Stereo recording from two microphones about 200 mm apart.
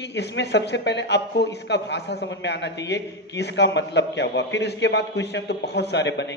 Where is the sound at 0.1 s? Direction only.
60° left (ahead or behind).